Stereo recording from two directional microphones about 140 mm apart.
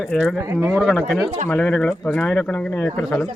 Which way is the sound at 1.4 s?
10° left (ahead or behind).